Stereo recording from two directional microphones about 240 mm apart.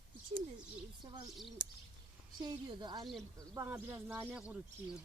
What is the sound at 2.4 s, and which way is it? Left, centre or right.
Speech, centre.